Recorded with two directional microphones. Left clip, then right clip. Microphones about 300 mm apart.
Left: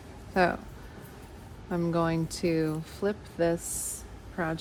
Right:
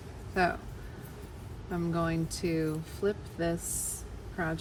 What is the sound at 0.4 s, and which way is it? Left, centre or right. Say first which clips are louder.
Speech: left 3 dB; left.